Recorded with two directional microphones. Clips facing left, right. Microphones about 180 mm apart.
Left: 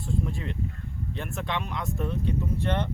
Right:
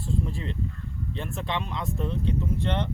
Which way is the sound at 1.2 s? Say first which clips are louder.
Right 1 dB; centre (ahead or behind).